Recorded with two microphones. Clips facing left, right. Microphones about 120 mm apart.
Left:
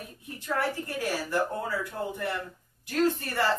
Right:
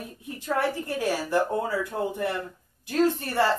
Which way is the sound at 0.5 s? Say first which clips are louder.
Right 3 dB; 20° right (ahead or behind).